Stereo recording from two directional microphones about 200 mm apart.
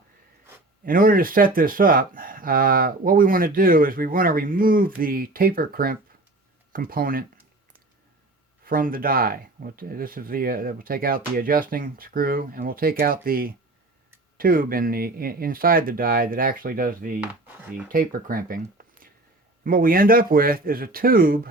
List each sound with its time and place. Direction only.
0.9 s speech: 45° right (ahead or behind)
8.6 s speech: 45° right (ahead or behind)
17.4 s speech: 10° right (ahead or behind)
17.8 s speech: 45° right (ahead or behind)